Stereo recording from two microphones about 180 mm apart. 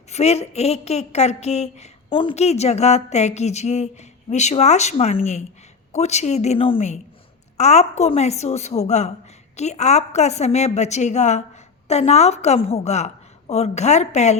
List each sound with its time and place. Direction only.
0.1 s a woman's voice: 35° left (ahead or behind)